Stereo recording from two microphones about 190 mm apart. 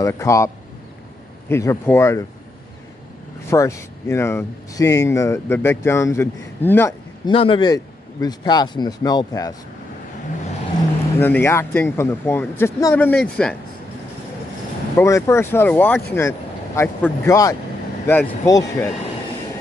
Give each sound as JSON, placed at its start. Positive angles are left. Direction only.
{"t": 0.0, "sound": "speech", "side_deg": 15}
{"t": 1.5, "sound": "speech", "side_deg": 15}
{"t": 3.4, "sound": "speech", "side_deg": 15}
{"t": 7.2, "sound": "speech", "side_deg": 25}
{"t": 11.1, "sound": "speech", "side_deg": 10}
{"t": 15.0, "sound": "speech", "side_deg": 15}